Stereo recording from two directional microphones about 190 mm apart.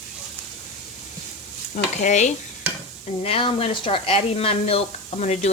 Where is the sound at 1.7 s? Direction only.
40° left (ahead or behind).